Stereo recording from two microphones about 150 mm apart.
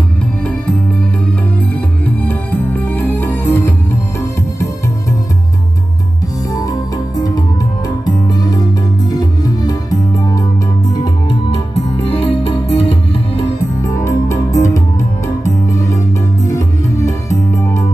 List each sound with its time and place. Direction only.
2.2 s music: 10° left (ahead or behind)
7.2 s music: 25° left (ahead or behind)
12.2 s music: 35° left (ahead or behind)
13.8 s music: 20° left (ahead or behind)
17.3 s music: 20° left (ahead or behind)